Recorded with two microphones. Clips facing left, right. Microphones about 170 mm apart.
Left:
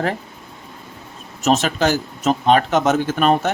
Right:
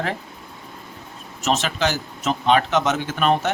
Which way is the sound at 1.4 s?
45° left (ahead or behind).